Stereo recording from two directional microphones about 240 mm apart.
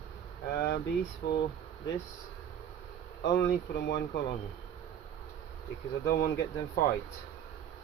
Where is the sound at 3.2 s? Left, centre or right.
Left.